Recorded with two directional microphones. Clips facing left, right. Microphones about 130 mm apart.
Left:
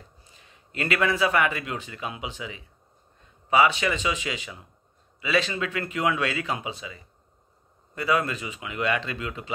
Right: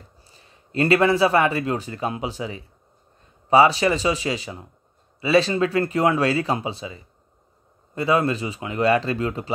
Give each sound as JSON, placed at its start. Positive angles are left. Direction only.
{"t": 0.2, "sound": "a man's voice", "side_deg": -35}